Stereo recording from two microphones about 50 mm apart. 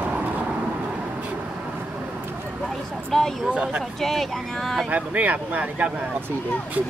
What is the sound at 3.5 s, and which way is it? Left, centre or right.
Speech, centre.